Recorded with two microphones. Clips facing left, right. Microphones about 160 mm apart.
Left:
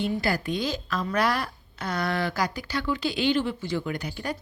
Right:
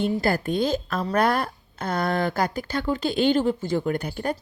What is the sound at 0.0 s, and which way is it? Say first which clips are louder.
Speech: right 4 dB; 50° right (ahead or behind).